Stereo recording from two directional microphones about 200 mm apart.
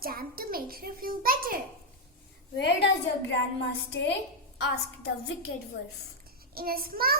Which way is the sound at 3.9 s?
60° left (ahead or behind).